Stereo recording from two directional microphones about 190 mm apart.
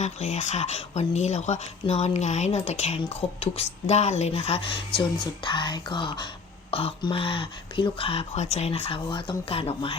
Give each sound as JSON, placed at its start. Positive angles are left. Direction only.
{"t": 0.0, "sound": "speech", "side_deg": 35}